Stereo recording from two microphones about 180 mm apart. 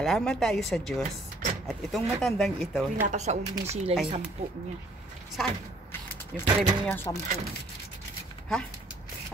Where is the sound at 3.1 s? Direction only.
40° right (ahead or behind).